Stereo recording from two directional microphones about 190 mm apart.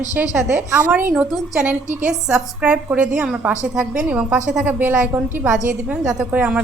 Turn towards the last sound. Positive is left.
turn(degrees=-5)  # may be behind; listen again after turning